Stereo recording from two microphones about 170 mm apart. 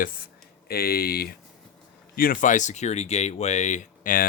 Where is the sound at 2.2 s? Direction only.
55° left (ahead or behind).